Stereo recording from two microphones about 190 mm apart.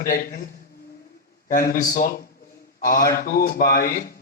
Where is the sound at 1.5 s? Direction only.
45° left (ahead or behind).